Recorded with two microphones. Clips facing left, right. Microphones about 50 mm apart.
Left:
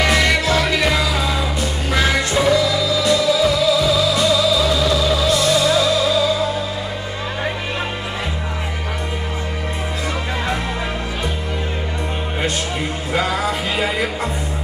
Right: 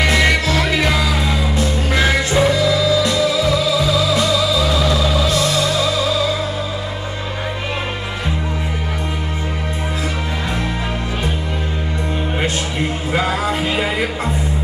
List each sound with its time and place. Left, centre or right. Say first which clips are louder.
0.2 s music: right 1 dB; centre
2.3 s music: right 1 dB; centre
13.5 s music: right 2 dB; centre